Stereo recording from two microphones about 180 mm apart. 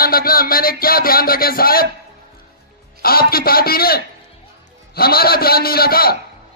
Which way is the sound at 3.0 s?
55° left (ahead or behind).